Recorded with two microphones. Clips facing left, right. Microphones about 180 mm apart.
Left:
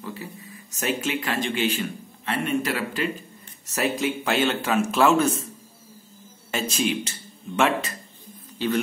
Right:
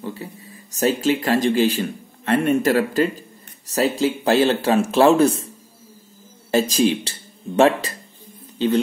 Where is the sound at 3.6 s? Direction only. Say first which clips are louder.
Right 5 dB; 30° right (ahead or behind).